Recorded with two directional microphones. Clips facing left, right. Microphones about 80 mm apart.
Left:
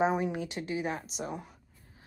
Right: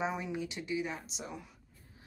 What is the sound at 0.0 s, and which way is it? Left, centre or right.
Speech, left.